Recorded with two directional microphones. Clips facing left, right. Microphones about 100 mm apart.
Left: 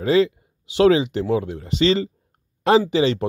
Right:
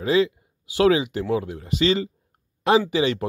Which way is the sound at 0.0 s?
35° left (ahead or behind).